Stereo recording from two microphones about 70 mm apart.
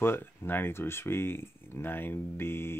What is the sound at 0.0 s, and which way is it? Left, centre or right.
Speech, left.